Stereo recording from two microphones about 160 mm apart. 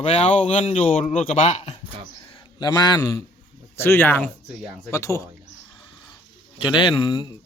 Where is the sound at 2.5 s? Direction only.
25° left (ahead or behind).